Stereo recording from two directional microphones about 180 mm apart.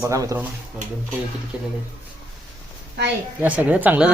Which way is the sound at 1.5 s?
5° right (ahead or behind).